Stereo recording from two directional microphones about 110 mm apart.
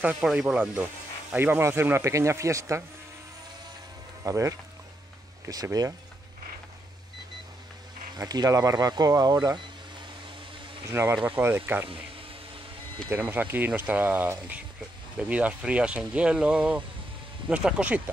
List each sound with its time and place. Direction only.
0.0 s speech: 15° right (ahead or behind)
4.2 s speech: 30° right (ahead or behind)
8.2 s speech: 35° right (ahead or behind)
10.9 s speech: 25° right (ahead or behind)
13.1 s speech: 15° right (ahead or behind)